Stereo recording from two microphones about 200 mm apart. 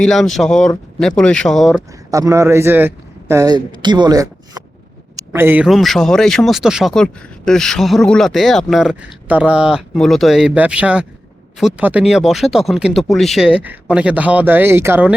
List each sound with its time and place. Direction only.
0.0 s speech: centre (ahead or behind)
2.0 s a man's voice: 15° right (ahead or behind)